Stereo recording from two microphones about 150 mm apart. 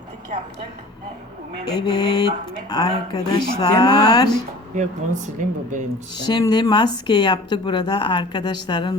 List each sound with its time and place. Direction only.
1.8 s speech: 30° left (ahead or behind)
4.7 s speech: 55° right (ahead or behind)
6.1 s speech: 30° left (ahead or behind)